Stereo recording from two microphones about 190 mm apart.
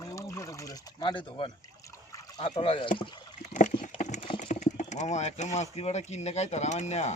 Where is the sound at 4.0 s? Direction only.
40° left (ahead or behind).